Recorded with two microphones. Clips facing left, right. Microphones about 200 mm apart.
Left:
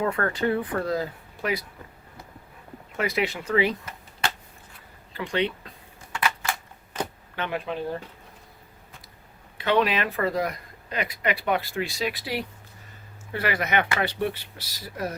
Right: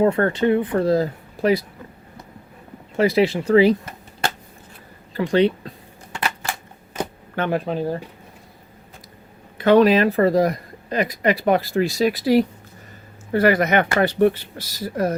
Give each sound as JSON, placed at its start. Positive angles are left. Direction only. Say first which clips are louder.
{"t": 0.0, "sound": "speech", "louder": "right 8 dB", "side_deg": -30}
{"t": 0.9, "sound": "speech", "louder": "right 8 dB", "side_deg": -35}
{"t": 2.9, "sound": "speech", "louder": "right 9 dB", "side_deg": -30}
{"t": 6.1, "sound": "a sound", "louder": "right 1 dB", "side_deg": -35}
{"t": 7.3, "sound": "speech", "louder": "right 7 dB", "side_deg": -45}
{"t": 9.6, "sound": "speech", "louder": "right 9 dB", "side_deg": -45}